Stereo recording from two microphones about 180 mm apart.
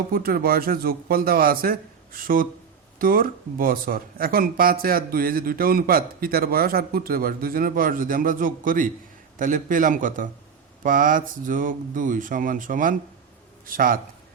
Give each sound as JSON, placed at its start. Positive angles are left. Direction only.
{"t": 0.1, "sound": "speech", "side_deg": -55}